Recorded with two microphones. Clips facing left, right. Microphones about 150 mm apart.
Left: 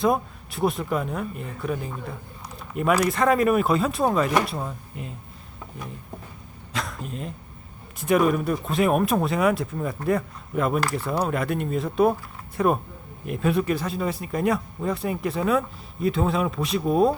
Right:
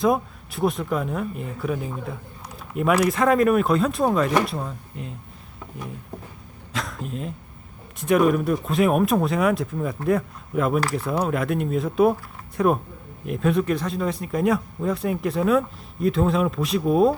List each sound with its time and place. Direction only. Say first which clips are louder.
0.0 s speech: right 1 dB; centre (ahead or behind)
6.7 s speech: right 1 dB; centre (ahead or behind)